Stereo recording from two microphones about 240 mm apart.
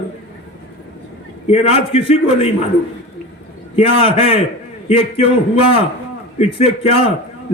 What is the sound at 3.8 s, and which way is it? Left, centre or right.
Speech, left.